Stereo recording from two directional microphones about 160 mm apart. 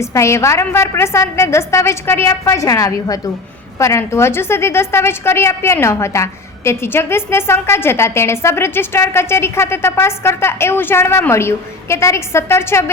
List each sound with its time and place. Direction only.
0.0 s a woman's voice: 15° left (ahead or behind)